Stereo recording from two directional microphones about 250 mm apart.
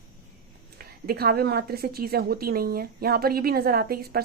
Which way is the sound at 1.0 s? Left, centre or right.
Right.